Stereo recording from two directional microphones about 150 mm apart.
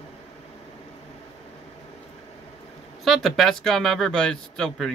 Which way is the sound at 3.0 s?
Centre (ahead or behind).